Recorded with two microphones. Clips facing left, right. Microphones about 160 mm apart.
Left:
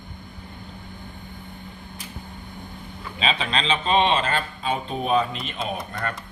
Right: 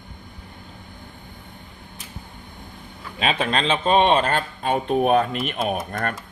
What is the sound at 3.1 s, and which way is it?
Speech, 50° right (ahead or behind).